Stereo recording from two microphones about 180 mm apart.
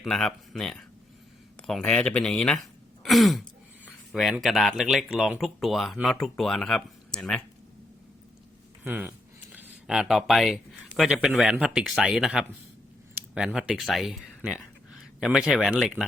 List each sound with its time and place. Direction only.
0.0 s speech: 5° left (ahead or behind)
8.8 s speech: 10° right (ahead or behind)